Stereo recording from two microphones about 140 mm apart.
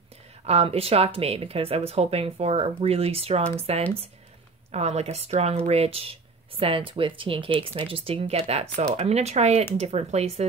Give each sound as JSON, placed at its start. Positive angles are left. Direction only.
{"t": 0.5, "sound": "speech", "side_deg": -45}